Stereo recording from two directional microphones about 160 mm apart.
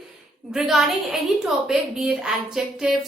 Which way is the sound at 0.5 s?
Centre (ahead or behind).